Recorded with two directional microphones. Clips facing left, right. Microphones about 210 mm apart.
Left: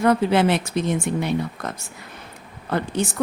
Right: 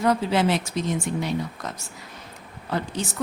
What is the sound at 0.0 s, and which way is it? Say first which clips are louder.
Speech: left 4 dB; 60° left (ahead or behind).